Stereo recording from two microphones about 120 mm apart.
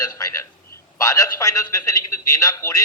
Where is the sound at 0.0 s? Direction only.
25° left (ahead or behind).